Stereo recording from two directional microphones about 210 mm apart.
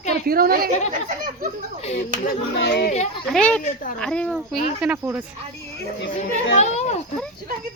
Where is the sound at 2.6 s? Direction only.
50° left (ahead or behind).